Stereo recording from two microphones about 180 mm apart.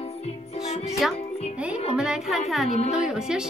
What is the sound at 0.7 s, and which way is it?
Speech, 35° left (ahead or behind).